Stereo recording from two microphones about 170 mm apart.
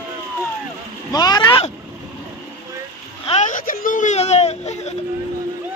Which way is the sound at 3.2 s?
45° left (ahead or behind).